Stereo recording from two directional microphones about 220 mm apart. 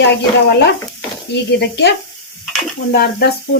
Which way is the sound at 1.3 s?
50° left (ahead or behind).